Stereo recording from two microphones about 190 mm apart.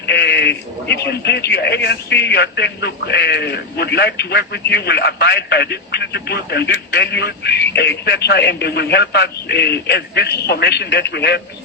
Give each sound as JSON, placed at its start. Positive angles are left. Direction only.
{"t": 0.0, "sound": "a man's voice", "side_deg": 60}